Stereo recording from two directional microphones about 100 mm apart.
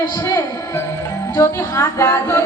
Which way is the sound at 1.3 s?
25° left (ahead or behind).